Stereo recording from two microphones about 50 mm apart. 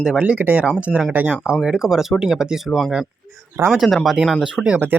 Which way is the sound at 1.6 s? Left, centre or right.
Centre.